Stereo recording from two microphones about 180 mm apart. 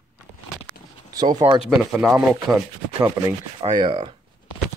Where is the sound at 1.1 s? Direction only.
20° right (ahead or behind).